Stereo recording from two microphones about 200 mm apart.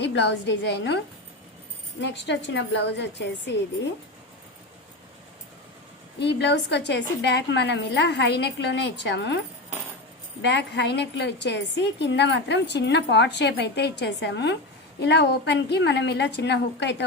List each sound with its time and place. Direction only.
0.0 s a woman's voice: 60° left (ahead or behind)
6.1 s a woman's voice: 60° left (ahead or behind)
10.4 s a woman's voice: 60° left (ahead or behind)